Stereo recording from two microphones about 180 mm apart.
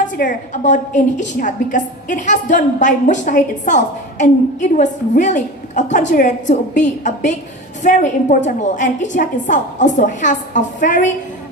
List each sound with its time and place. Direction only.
0.0 s a woman's voice: 45° left (ahead or behind)